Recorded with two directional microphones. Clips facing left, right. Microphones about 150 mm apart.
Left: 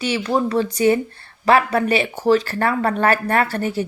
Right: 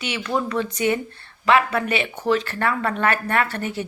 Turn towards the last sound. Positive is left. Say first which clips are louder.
# left 4 dB
turn(degrees=35)  # may be behind; listen again after turning